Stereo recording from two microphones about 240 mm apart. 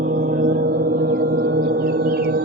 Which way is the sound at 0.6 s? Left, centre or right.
Right.